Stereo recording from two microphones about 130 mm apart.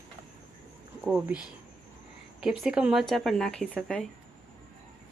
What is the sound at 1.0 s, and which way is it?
Speech, 5° right (ahead or behind).